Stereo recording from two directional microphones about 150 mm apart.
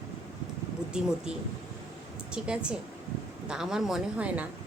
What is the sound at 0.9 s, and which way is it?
Speech, 5° right (ahead or behind).